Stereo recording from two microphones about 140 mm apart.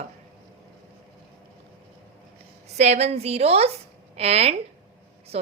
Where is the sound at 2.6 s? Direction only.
50° right (ahead or behind).